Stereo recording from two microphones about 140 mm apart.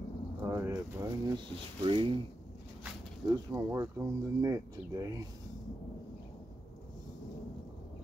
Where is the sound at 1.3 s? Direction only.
35° right (ahead or behind).